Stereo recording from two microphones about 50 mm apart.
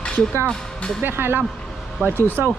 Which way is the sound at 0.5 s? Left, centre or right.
Centre.